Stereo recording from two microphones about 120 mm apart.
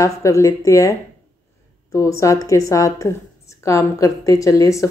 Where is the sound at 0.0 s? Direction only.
25° left (ahead or behind).